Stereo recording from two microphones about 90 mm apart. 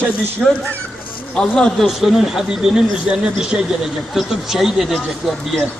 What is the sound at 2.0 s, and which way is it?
A man's voice, centre (ahead or behind).